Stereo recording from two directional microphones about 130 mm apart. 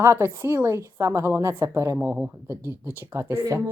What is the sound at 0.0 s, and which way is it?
Speech, 20° right (ahead or behind).